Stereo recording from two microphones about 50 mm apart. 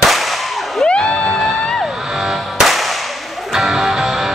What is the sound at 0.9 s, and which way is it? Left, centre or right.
Music, centre.